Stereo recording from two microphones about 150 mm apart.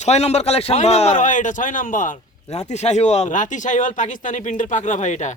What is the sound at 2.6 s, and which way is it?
Speech, 45° left (ahead or behind).